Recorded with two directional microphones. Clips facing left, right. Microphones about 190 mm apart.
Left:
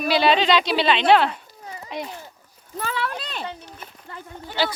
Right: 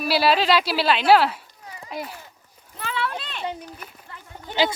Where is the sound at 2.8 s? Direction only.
40° left (ahead or behind).